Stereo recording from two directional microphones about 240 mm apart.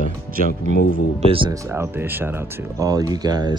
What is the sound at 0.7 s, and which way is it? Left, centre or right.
Speech, left.